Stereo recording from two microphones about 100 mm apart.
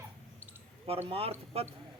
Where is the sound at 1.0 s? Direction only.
75° right (ahead or behind).